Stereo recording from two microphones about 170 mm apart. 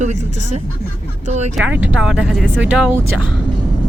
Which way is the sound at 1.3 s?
40° right (ahead or behind).